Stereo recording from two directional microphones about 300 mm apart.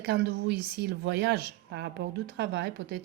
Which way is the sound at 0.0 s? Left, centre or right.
Right.